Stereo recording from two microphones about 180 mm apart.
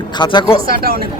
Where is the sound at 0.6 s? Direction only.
55° right (ahead or behind).